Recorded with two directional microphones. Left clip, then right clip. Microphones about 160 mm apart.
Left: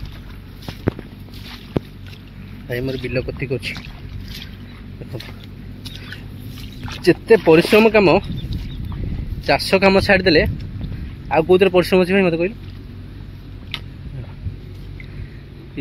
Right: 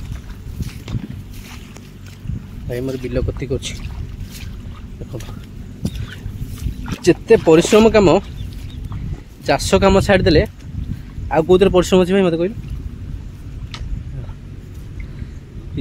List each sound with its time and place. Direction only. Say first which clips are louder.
2.7 s speech: even; 5° right (ahead or behind)
7.0 s speech: right 1 dB; 15° right (ahead or behind)
9.5 s speech: even; 20° right (ahead or behind)